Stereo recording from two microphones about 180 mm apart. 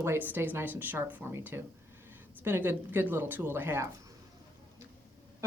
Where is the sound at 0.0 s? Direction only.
10° right (ahead or behind).